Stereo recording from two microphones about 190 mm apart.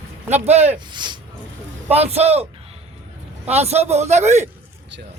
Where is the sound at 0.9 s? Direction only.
25° right (ahead or behind).